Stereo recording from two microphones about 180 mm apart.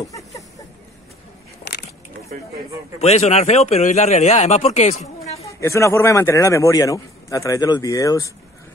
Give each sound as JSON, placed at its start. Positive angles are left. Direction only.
{"t": 1.6, "sound": "crushing", "side_deg": 70}
{"t": 3.0, "sound": "speech", "side_deg": 35}
{"t": 5.6, "sound": "a man's voice", "side_deg": 15}